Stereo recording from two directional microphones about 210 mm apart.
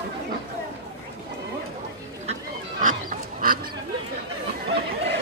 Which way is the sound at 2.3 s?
35° right (ahead or behind).